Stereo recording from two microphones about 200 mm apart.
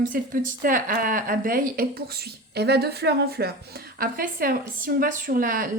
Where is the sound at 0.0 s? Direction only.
45° right (ahead or behind).